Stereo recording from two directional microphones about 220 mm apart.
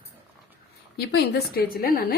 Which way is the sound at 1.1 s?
40° left (ahead or behind).